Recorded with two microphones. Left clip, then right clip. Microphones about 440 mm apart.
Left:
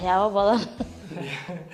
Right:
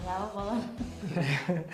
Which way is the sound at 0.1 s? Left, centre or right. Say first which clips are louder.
Left 14 dB; left.